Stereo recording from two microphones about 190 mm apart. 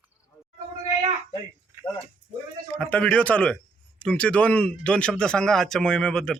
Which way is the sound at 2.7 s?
5° left (ahead or behind).